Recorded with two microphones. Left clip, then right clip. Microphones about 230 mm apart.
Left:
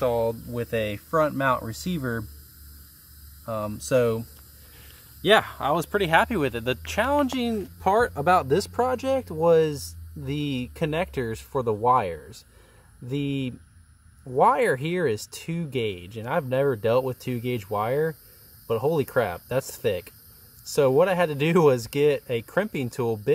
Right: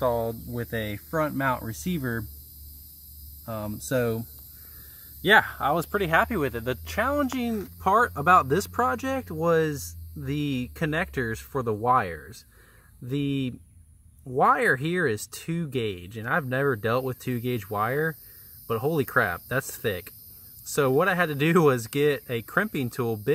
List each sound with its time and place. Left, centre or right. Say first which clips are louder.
0.6 s speech: left 4 dB; centre
3.4 s speech: left 4 dB; centre
5.2 s speech: even; centre